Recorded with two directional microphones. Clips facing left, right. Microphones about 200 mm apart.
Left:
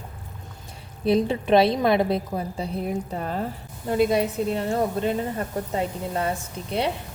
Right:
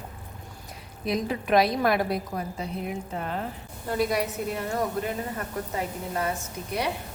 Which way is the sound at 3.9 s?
25° left (ahead or behind).